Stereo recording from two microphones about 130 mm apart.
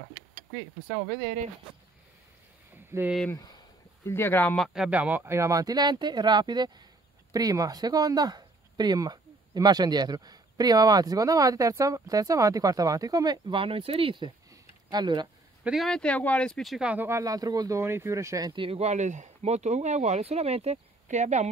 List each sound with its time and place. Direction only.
2.9 s speech: 25° right (ahead or behind)
3.3 s speech: 30° left (ahead or behind)
4.0 s speech: 20° left (ahead or behind)
4.6 s speech: centre (ahead or behind); by 15.2 s 35° right (ahead or behind)
15.6 s speech: centre (ahead or behind)
16.9 s speech: 15° right (ahead or behind)
17.2 s speech: 30° right (ahead or behind)
18.5 s speech: 45° right (ahead or behind); by 21.5 s 65° right (ahead or behind)